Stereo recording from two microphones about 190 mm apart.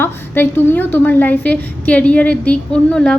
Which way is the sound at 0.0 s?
10° left (ahead or behind).